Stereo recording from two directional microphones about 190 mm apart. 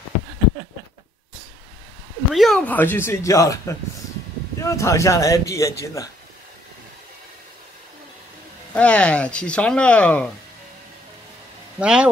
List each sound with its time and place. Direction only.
2.3 s a man's voice: centre (ahead or behind); by 6.0 s 15° left (ahead or behind)
8.7 s speech: 5° left (ahead or behind)
11.8 s speech: 5° right (ahead or behind)